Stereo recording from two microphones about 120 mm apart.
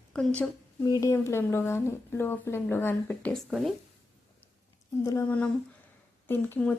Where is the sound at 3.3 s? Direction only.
Centre (ahead or behind).